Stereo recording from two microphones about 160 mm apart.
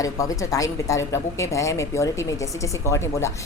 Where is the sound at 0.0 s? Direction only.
20° left (ahead or behind).